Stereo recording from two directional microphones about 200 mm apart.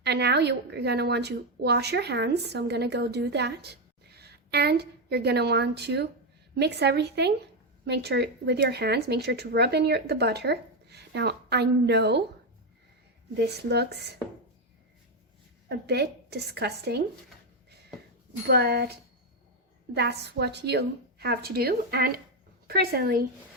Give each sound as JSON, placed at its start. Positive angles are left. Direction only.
{"t": 0.0, "sound": "a woman's voice", "side_deg": -55}
{"t": 13.4, "sound": "a woman's voice", "side_deg": -55}
{"t": 15.9, "sound": "a woman's voice", "side_deg": -55}
{"t": 18.4, "sound": "a woman's voice", "side_deg": -55}